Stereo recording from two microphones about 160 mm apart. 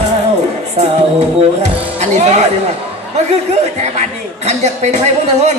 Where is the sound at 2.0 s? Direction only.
45° right (ahead or behind).